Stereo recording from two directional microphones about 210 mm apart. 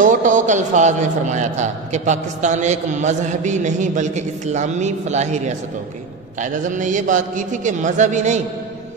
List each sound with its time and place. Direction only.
0.0 s a man's voice: 35° right (ahead or behind)